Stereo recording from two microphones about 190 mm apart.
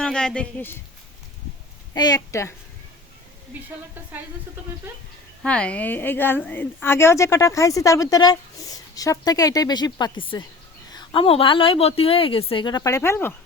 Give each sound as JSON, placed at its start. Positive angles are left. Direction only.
{"t": 0.0, "sound": "speech", "side_deg": 5}
{"t": 1.9, "sound": "a woman's voice", "side_deg": 20}
{"t": 5.4, "sound": "a woman's voice", "side_deg": 5}